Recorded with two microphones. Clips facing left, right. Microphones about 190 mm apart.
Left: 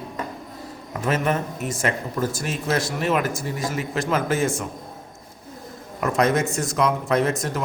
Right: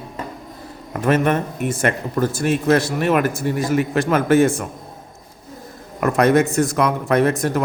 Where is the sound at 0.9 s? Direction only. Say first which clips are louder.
Right 5 dB; 55° right (ahead or behind).